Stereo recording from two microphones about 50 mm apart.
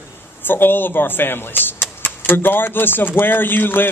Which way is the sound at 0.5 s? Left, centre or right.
Left.